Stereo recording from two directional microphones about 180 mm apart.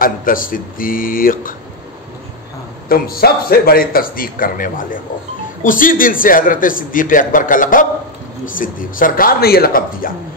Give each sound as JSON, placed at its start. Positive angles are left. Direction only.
{"t": 0.0, "sound": "a man's voice", "side_deg": 50}
{"t": 2.9, "sound": "a man's voice", "side_deg": 55}